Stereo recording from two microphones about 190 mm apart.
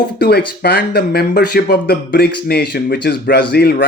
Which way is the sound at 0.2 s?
60° left (ahead or behind).